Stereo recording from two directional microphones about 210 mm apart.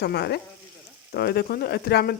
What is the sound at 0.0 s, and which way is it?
Speech, 50° left (ahead or behind).